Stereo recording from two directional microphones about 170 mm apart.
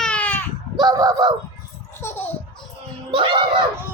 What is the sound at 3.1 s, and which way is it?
Screaming, 30° right (ahead or behind).